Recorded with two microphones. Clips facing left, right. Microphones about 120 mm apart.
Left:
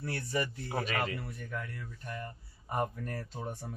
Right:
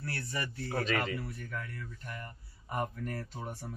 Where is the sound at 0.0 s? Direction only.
15° left (ahead or behind).